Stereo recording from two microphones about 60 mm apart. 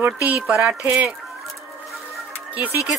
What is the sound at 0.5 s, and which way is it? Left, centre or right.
Speech, centre.